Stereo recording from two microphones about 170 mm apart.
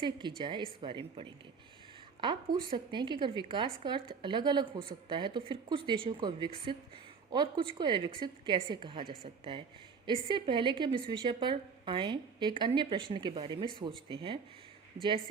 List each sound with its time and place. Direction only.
0.0 s a woman's voice: 25° right (ahead or behind)